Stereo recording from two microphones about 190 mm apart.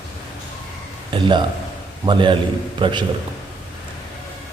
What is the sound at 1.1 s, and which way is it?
A man's voice, 25° right (ahead or behind).